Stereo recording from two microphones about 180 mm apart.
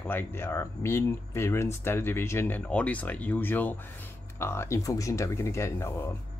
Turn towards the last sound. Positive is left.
turn(degrees=15)  # may be behind; listen again after turning